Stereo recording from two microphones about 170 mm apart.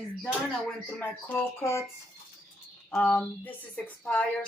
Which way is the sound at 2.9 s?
5° left (ahead or behind).